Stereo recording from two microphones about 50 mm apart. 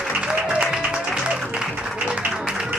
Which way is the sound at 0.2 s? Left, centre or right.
Centre.